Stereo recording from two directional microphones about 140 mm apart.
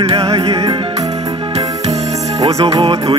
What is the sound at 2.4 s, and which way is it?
Music, 45° right (ahead or behind).